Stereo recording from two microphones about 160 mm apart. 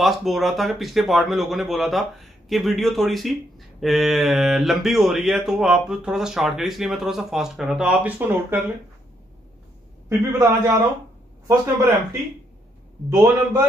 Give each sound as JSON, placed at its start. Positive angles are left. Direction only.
{"t": 0.0, "sound": "speech", "side_deg": 0}
{"t": 10.0, "sound": "a man's voice", "side_deg": -15}